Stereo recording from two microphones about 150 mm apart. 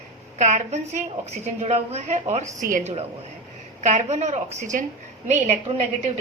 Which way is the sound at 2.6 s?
65° right (ahead or behind).